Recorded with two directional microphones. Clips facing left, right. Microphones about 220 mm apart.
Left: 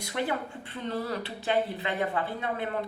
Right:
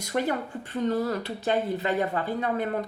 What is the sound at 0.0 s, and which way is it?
Speech, 40° right (ahead or behind).